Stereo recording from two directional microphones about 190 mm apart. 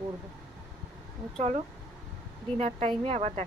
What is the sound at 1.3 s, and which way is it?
Speech, 35° right (ahead or behind).